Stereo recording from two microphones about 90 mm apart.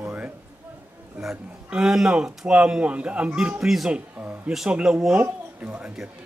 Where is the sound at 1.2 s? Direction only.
5° right (ahead or behind).